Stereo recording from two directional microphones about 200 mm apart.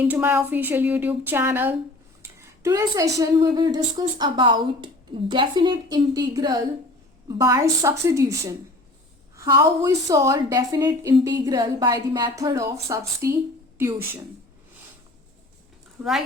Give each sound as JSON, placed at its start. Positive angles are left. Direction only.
{"t": 0.0, "sound": "a woman's voice", "side_deg": -10}